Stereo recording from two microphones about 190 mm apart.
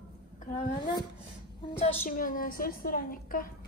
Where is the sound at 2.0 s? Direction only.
45° left (ahead or behind).